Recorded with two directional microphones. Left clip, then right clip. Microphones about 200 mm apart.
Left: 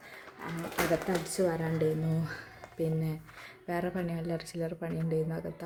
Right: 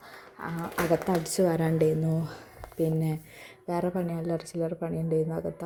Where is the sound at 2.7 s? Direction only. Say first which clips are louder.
Right 5 dB; 25° right (ahead or behind).